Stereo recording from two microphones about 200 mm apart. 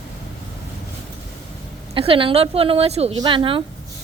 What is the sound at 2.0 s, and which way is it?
A woman's voice, 25° right (ahead or behind).